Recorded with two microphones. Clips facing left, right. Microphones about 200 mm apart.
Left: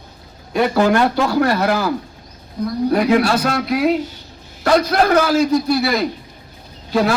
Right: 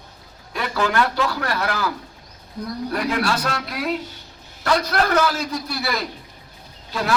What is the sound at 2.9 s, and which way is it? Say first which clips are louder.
Speech: left 8 dB; 50° left (ahead or behind).